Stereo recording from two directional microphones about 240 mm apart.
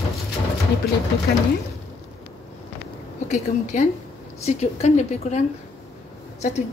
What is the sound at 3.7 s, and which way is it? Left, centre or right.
A woman's voice, left.